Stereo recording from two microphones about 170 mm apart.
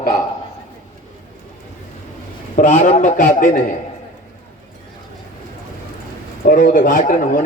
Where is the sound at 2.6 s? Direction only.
50° left (ahead or behind).